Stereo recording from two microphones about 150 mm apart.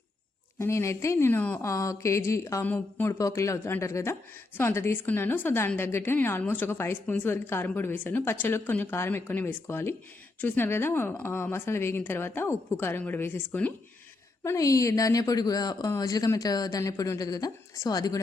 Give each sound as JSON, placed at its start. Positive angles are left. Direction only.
{"t": 0.6, "sound": "a woman's voice", "side_deg": 20}